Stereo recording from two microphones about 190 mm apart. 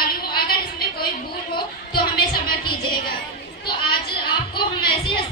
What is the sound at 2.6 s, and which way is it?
Music, 25° left (ahead or behind).